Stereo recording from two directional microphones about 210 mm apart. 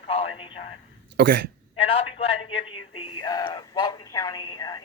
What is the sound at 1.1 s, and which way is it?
Speech, 50° right (ahead or behind).